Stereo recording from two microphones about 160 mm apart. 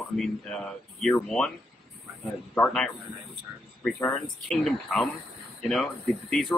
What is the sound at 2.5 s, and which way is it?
Speech, 5° left (ahead or behind).